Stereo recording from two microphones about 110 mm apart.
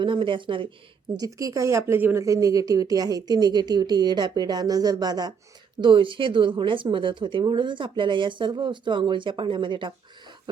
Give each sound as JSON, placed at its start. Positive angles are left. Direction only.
{"t": 0.0, "sound": "a woman's voice", "side_deg": -50}
{"t": 1.1, "sound": "speech", "side_deg": -35}
{"t": 2.0, "sound": "speech", "side_deg": -15}
{"t": 2.2, "sound": "speech", "side_deg": -30}
{"t": 5.8, "sound": "a woman's voice", "side_deg": -50}